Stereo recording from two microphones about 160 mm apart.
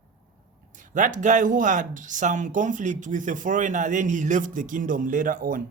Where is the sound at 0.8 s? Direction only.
55° right (ahead or behind).